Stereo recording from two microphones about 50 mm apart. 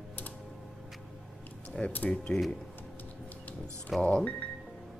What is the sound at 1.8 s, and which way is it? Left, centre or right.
Speech, centre.